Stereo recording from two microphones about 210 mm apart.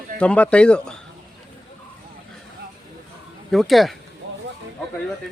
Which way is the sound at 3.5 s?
Centre (ahead or behind).